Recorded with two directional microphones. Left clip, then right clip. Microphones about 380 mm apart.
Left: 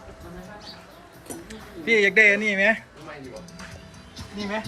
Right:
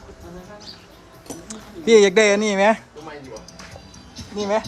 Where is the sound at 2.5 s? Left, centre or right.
Centre.